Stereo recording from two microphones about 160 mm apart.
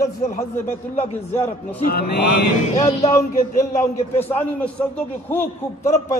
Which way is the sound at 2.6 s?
40° left (ahead or behind).